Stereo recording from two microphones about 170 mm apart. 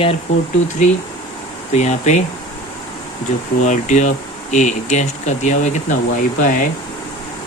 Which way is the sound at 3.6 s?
45° left (ahead or behind).